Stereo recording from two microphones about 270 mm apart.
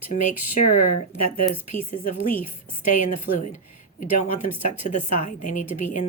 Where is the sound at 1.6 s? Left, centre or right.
Left.